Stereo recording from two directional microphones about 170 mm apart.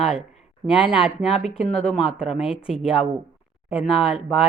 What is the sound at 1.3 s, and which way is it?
Speech, 40° left (ahead or behind).